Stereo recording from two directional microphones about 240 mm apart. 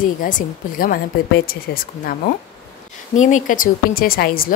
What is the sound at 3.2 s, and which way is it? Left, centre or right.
A woman's voice, left.